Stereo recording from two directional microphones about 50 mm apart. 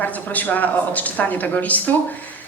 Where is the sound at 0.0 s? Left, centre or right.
Left.